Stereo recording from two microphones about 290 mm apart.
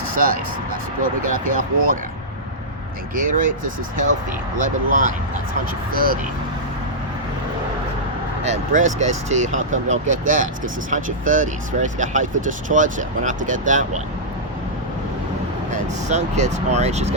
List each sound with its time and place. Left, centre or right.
0.1 s speech: right
3.2 s speech: right
8.4 s speech: right
15.7 s speech: right